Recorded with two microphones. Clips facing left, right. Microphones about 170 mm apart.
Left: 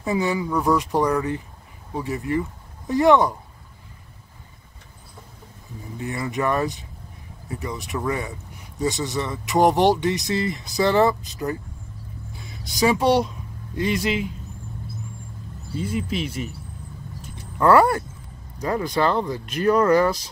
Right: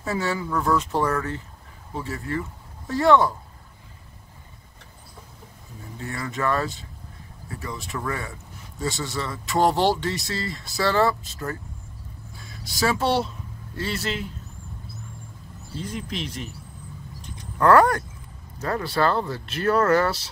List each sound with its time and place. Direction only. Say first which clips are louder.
0.0 s speech: left 4 dB; 15° left (ahead or behind)
5.9 s speech: left 4 dB; 20° left (ahead or behind)
15.7 s speech: left 6 dB; 10° left (ahead or behind)
17.2 s a sound: left 1 dB; 5° left (ahead or behind)
18.6 s speech: left 2 dB; 15° left (ahead or behind)